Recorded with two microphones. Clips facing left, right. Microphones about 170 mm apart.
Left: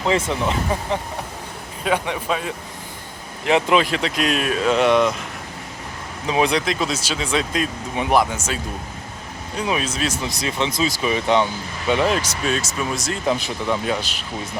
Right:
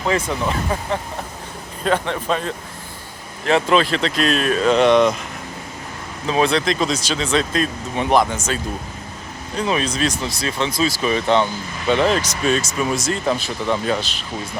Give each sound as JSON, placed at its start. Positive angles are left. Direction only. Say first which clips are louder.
{"t": 0.0, "sound": "speech", "louder": "even", "side_deg": 20}
{"t": 1.8, "sound": "speech", "louder": "right 2 dB", "side_deg": 10}
{"t": 6.2, "sound": "speech", "louder": "right 2 dB", "side_deg": 15}
{"t": 10.2, "sound": "speech", "louder": "right 1 dB", "side_deg": 20}
{"t": 13.2, "sound": "speech", "louder": "left 3 dB", "side_deg": 15}